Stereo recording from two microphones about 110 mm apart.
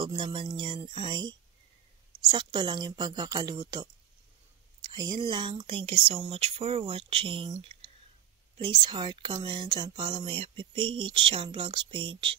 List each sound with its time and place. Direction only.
0.2 s a woman's voice: 45° right (ahead or behind)
4.9 s speech: 40° right (ahead or behind)